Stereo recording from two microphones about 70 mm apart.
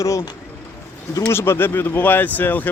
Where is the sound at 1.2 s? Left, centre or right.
Left.